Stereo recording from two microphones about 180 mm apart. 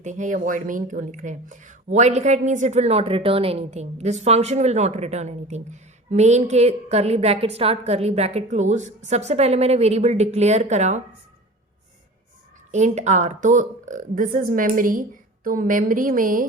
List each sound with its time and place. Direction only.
0.0 s speech: 40° right (ahead or behind)
12.7 s a woman's voice: 40° right (ahead or behind)